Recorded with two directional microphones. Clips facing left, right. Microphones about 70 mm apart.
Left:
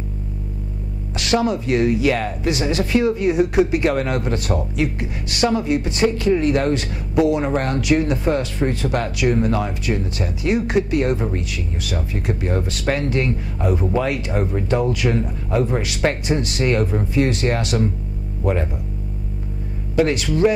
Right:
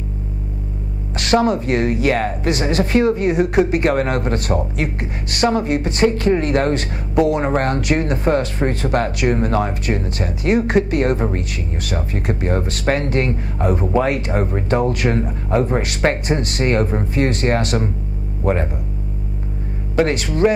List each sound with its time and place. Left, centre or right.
1.1 s speech: right
20.0 s speech: right